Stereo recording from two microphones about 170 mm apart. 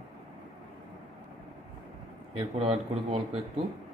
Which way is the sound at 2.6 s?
35° right (ahead or behind).